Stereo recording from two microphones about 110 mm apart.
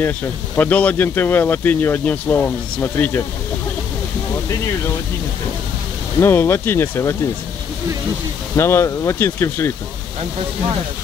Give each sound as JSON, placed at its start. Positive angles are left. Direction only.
{"t": 0.6, "sound": "speech", "side_deg": 15}
{"t": 6.1, "sound": "speech", "side_deg": 20}
{"t": 8.5, "sound": "speech", "side_deg": 25}